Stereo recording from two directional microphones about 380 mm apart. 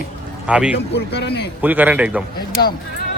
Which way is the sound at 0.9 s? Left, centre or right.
Left.